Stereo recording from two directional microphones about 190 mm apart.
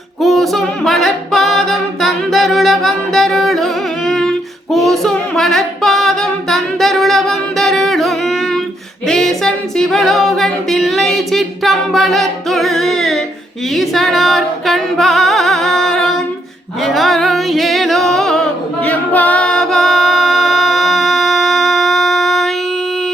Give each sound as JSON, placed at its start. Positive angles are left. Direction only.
{"t": 0.2, "sound": "music", "side_deg": 0}